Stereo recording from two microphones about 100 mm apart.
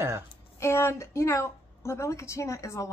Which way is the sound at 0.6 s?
25° left (ahead or behind).